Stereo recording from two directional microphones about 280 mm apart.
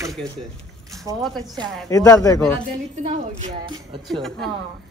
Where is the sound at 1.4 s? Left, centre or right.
Centre.